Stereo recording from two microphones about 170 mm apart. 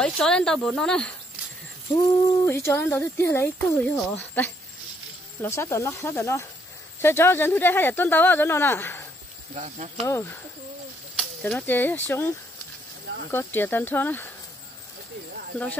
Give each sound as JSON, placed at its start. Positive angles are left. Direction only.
{"t": 0.0, "sound": "speech", "side_deg": 5}
{"t": 2.4, "sound": "speech", "side_deg": 15}
{"t": 9.6, "sound": "speech", "side_deg": -40}
{"t": 10.0, "sound": "speech", "side_deg": 15}
{"t": 13.3, "sound": "speech", "side_deg": 15}